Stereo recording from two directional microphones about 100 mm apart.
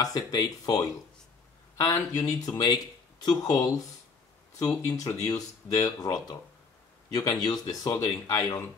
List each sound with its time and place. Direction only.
0.0 s a man's voice: 40° left (ahead or behind)